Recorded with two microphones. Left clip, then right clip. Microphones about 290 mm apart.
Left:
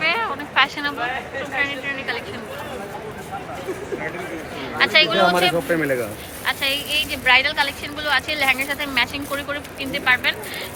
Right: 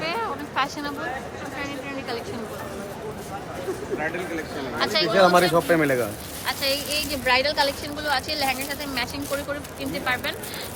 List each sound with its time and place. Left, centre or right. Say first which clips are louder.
0.0 s a sound: left 6 dB; centre
1.5 s speech: left 10 dB; centre
4.8 s speech: left 3 dB; centre
5.7 s speech: even; right
6.4 s speech: left 3 dB; centre